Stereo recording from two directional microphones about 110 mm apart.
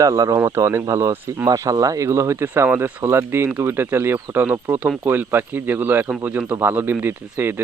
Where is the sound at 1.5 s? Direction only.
35° right (ahead or behind).